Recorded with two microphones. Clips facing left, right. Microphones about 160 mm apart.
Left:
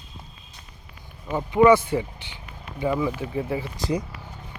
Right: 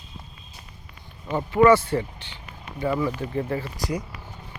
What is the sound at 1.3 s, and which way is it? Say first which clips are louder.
Speech: even; 15° left (ahead or behind).